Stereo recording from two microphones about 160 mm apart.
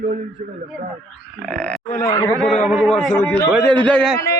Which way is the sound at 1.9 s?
20° left (ahead or behind).